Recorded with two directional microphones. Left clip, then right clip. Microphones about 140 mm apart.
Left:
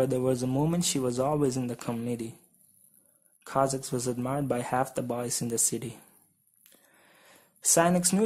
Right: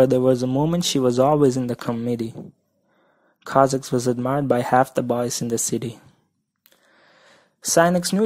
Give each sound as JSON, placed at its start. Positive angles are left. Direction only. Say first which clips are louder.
{"t": 0.0, "sound": "speech", "louder": "right 10 dB", "side_deg": -40}
{"t": 3.4, "sound": "speech", "louder": "right 10 dB", "side_deg": -40}
{"t": 6.9, "sound": "a sound", "louder": "right 6 dB", "side_deg": -35}